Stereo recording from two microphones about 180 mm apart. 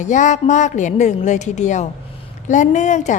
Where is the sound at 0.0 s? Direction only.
45° left (ahead or behind).